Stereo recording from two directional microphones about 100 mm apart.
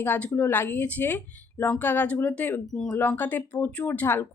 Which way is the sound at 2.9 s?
20° left (ahead or behind).